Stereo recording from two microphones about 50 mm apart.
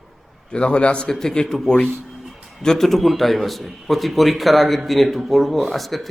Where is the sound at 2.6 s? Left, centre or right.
Centre.